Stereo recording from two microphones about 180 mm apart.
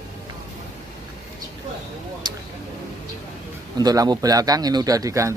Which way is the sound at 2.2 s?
25° right (ahead or behind).